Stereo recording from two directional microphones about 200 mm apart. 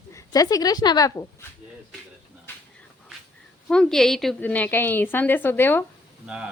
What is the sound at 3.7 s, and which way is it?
Speech, 5° left (ahead or behind).